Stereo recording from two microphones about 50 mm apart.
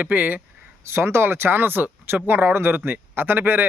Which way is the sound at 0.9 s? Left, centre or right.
Right.